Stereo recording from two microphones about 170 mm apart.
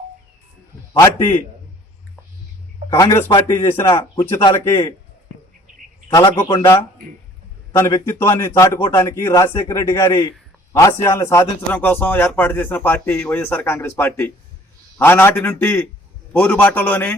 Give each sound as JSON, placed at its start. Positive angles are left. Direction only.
{"t": 2.9, "sound": "a man's voice", "side_deg": 20}
{"t": 6.1, "sound": "a man's voice", "side_deg": 20}